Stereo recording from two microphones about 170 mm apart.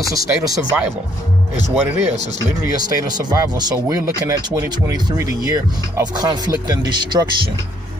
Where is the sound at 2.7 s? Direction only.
25° right (ahead or behind).